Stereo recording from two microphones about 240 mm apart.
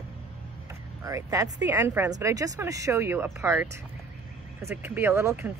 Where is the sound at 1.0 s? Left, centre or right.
Centre.